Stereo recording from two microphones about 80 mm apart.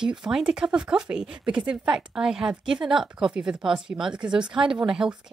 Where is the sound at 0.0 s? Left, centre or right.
Centre.